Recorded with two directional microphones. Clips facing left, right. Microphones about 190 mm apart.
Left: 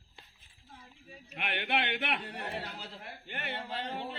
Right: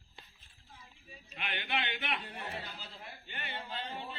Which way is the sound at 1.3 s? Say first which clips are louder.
Left 4 dB; 65° left (ahead or behind).